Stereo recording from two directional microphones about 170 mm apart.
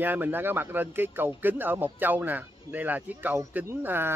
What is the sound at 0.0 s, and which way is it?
Speech, 10° right (ahead or behind).